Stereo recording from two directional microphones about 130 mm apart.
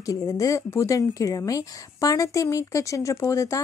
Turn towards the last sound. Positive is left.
turn(degrees=25)  # may be behind; listen again after turning